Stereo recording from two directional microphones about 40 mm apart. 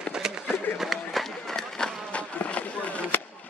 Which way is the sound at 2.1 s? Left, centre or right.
Left.